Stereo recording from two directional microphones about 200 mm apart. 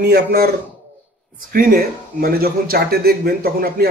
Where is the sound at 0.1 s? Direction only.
50° right (ahead or behind).